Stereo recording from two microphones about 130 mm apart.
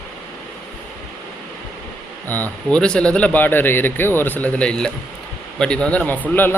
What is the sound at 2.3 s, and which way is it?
Speech, 10° left (ahead or behind).